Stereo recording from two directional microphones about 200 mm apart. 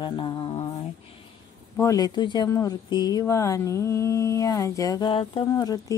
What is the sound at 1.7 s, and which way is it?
Speech, 15° left (ahead or behind).